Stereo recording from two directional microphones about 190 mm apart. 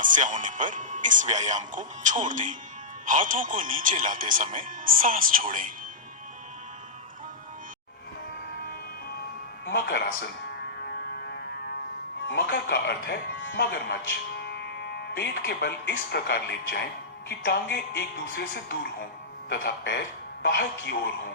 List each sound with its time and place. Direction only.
0.0 s speech: 45° right (ahead or behind)
9.6 s speech: 60° left (ahead or behind)
10.8 s music: 60° left (ahead or behind)
12.3 s speech: 60° left (ahead or behind)